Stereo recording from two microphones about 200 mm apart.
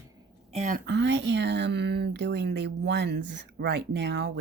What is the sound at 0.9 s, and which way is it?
A woman's voice, 65° right (ahead or behind).